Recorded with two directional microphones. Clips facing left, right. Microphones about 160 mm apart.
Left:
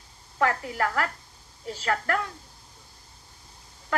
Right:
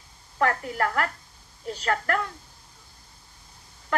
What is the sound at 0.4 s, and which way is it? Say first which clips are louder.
A woman's voice: right 1 dB; 25° left (ahead or behind).